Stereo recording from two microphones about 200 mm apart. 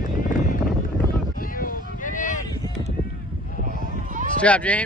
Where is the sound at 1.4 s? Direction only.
45° left (ahead or behind).